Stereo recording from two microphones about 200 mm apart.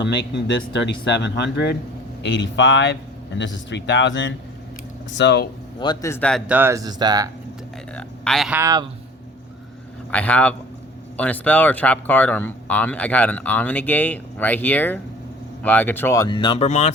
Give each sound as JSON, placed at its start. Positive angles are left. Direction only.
{"t": 0.0, "sound": "speech", "side_deg": 60}
{"t": 5.8, "sound": "speech", "side_deg": 20}
{"t": 6.5, "sound": "speech", "side_deg": -10}
{"t": 7.9, "sound": "speech", "side_deg": 5}
{"t": 10.1, "sound": "speech", "side_deg": 5}